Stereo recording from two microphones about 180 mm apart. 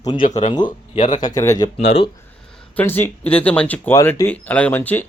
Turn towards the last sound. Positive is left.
turn(degrees=10)  # may be behind; listen again after turning